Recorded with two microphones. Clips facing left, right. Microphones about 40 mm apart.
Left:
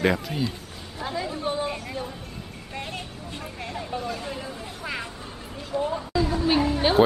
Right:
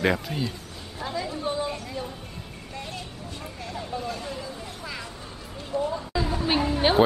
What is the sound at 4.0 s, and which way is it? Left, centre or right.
Speech, centre.